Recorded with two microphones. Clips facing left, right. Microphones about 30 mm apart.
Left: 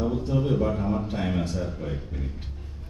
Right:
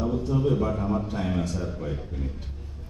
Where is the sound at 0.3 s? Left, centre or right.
Centre.